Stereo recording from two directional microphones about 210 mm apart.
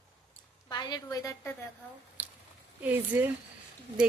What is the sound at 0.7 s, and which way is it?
Speech, 20° left (ahead or behind).